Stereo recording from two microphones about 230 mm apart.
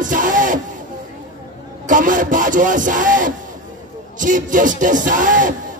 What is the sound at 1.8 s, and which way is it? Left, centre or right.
Speech, right.